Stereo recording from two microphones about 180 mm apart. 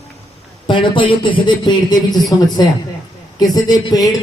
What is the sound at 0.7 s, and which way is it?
A man's voice, 30° left (ahead or behind).